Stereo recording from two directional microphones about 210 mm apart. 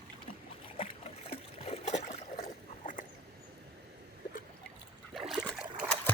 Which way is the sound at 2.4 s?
40° left (ahead or behind).